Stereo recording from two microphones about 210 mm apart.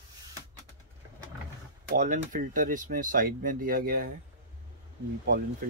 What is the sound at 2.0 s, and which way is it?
Speech, 40° right (ahead or behind).